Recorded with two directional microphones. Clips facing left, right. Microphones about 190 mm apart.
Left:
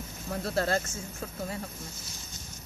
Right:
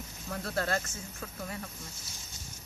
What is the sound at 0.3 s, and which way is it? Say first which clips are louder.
Speech: left 4 dB; 30° left (ahead or behind).